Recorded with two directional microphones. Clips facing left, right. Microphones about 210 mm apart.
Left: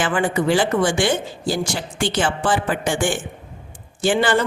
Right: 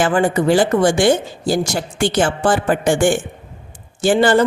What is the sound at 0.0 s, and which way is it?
Speech, 40° right (ahead or behind).